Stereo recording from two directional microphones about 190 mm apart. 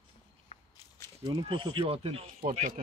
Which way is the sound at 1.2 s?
25° right (ahead or behind).